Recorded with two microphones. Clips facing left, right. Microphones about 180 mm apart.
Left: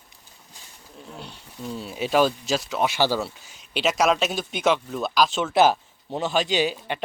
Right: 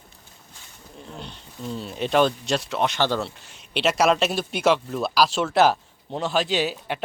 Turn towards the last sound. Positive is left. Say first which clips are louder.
# left 1 dB
turn(degrees=0)  # may be behind; listen again after turning